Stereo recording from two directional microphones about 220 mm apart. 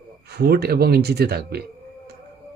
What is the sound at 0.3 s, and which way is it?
Speech, 45° right (ahead or behind).